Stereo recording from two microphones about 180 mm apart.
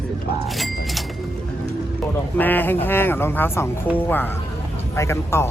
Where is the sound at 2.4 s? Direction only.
10° left (ahead or behind).